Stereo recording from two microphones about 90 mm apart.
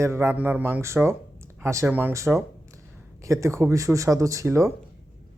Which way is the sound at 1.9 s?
20° right (ahead or behind).